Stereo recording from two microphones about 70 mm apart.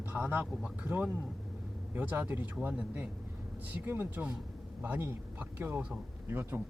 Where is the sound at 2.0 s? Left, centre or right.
Right.